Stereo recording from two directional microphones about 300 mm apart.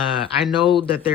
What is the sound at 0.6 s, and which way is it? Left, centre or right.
Speech, centre.